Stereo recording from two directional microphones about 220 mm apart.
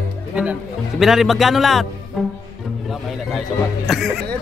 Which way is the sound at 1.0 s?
Centre (ahead or behind).